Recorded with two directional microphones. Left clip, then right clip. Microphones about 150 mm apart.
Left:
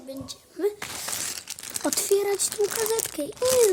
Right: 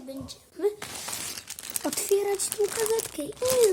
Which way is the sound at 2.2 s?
40° left (ahead or behind).